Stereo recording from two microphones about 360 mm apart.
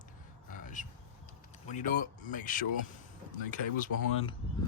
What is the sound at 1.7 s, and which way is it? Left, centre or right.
Speech, left.